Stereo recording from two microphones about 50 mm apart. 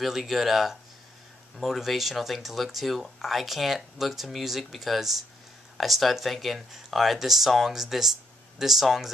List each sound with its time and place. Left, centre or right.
0.0 s speech: centre